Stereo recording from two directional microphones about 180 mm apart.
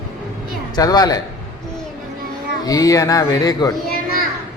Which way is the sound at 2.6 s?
20° left (ahead or behind).